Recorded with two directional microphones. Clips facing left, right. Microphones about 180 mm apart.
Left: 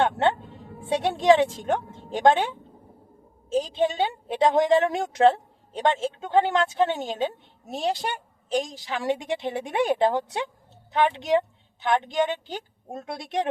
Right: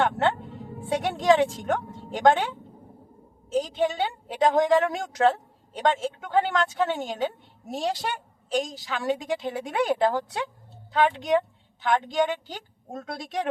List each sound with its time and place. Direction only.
0.9 s a woman's voice: 25° left (ahead or behind)
3.5 s a woman's voice: 25° left (ahead or behind)